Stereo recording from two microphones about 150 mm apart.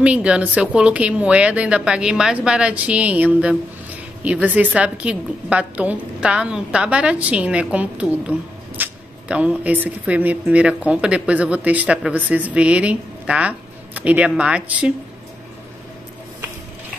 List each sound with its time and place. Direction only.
0.0 s a woman's voice: 10° right (ahead or behind)